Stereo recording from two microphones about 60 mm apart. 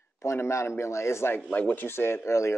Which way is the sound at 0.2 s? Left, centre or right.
Left.